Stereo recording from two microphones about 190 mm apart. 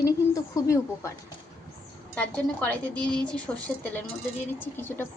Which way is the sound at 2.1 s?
10° left (ahead or behind).